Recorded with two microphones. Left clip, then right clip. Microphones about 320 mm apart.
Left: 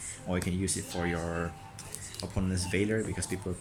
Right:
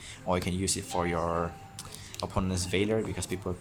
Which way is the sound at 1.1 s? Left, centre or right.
Right.